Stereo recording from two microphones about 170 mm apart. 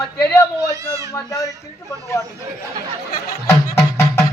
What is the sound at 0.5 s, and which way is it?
Speech, 20° right (ahead or behind).